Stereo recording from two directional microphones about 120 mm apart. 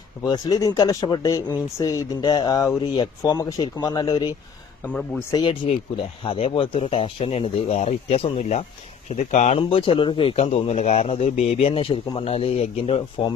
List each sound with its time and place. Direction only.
0.3 s speech: 30° left (ahead or behind)
5.3 s speech: 40° left (ahead or behind); by 8.6 s 65° left (ahead or behind)
9.0 s speech: 75° left (ahead or behind)
9.6 s speech: 50° left (ahead or behind)